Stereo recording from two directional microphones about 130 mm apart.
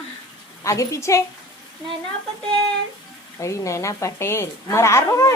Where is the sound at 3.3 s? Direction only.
25° left (ahead or behind).